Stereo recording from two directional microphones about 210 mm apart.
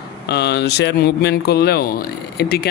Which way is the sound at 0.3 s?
50° left (ahead or behind).